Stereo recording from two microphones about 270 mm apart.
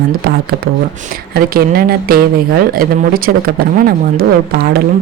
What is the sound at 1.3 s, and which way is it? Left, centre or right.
Speech, right.